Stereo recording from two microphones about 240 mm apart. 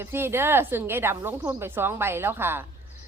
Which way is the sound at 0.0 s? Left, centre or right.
Centre.